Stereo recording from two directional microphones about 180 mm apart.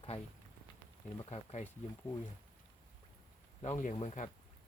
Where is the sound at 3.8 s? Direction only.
35° left (ahead or behind).